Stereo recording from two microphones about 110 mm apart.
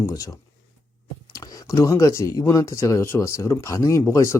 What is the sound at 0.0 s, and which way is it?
Speech, 35° left (ahead or behind).